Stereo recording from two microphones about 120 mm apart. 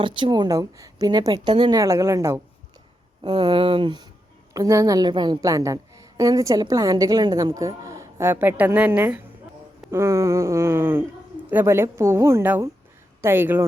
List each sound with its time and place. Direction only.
0.0 s a woman's voice: 45° right (ahead or behind)
1.8 s a woman's voice: 25° right (ahead or behind)
3.2 s a sound: 50° right (ahead or behind)
4.5 s a woman's voice: 30° right (ahead or behind)